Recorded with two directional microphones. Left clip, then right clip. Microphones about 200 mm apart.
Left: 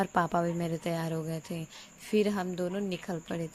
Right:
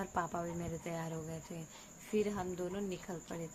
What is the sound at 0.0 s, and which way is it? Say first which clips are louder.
A woman's voice: left 10 dB; 40° left (ahead or behind).